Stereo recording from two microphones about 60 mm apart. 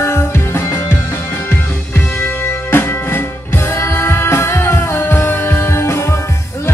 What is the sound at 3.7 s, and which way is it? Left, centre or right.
Music, left.